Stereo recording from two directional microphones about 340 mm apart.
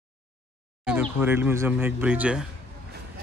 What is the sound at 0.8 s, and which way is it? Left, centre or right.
Speech, centre.